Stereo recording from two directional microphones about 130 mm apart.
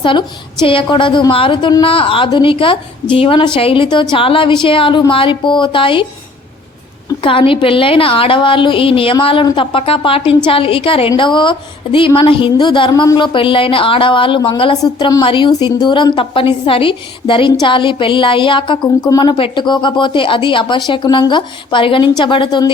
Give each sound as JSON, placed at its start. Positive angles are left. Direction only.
{"t": 0.0, "sound": "a woman's voice", "side_deg": 40}
{"t": 7.2, "sound": "a woman's voice", "side_deg": 40}
{"t": 14.8, "sound": "a woman's voice", "side_deg": 30}